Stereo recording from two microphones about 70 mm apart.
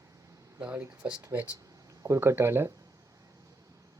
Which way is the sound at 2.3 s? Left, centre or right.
Right.